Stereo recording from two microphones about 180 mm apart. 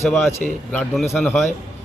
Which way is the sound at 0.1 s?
10° left (ahead or behind).